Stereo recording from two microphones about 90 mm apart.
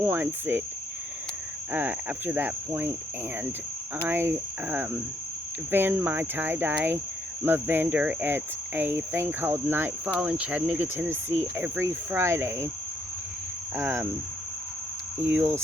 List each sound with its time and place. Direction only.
0.0 s speech: 20° right (ahead or behind)
1.7 s speech: 20° right (ahead or behind)
4.0 s speech: 25° right (ahead or behind)
10.2 s speech: 10° right (ahead or behind); by 12.7 s 30° right (ahead or behind)
13.7 s speech: 25° right (ahead or behind)
15.2 s speech: 20° right (ahead or behind)